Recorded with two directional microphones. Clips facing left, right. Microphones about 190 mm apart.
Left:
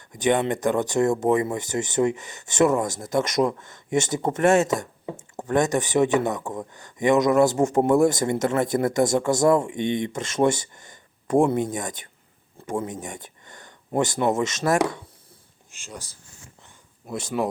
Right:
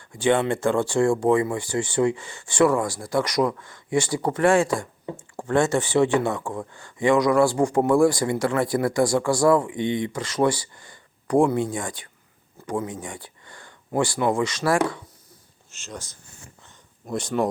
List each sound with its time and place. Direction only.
0.2 s speech: 20° left (ahead or behind)
17.1 s speech: 5° left (ahead or behind)